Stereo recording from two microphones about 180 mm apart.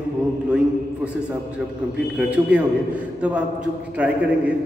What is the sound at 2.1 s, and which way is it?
A man's voice, 10° right (ahead or behind).